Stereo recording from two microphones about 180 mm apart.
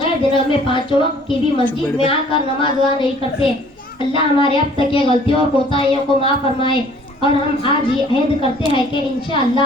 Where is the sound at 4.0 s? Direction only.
30° left (ahead or behind).